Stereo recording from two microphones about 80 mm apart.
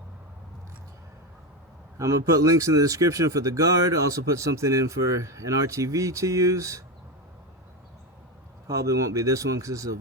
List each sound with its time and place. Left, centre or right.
2.0 s speech: right
8.6 s speech: right